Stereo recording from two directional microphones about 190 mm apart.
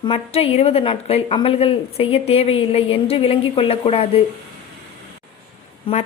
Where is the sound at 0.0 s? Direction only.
30° left (ahead or behind).